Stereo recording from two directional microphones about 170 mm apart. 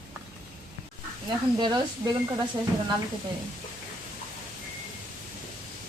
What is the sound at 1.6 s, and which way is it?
Speech, 25° right (ahead or behind).